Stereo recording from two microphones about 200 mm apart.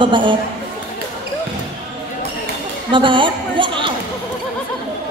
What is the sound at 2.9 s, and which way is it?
Speech, 25° right (ahead or behind).